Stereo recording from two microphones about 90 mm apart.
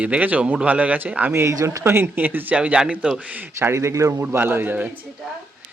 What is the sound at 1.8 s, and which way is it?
Speech, 25° right (ahead or behind).